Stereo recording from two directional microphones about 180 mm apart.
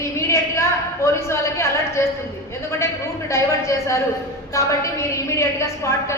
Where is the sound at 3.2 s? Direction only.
15° left (ahead or behind).